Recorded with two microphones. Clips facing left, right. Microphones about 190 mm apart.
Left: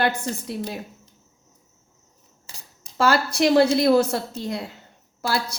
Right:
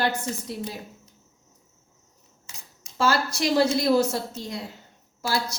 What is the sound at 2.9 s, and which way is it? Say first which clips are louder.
A woman's voice: left 4 dB; 60° left (ahead or behind).